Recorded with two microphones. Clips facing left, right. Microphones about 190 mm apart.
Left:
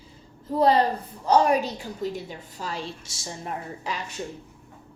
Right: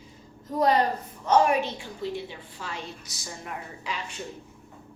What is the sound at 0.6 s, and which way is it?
A woman's voice, 30° left (ahead or behind).